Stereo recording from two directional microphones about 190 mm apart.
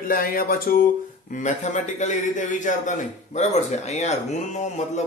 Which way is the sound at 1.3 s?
40° left (ahead or behind).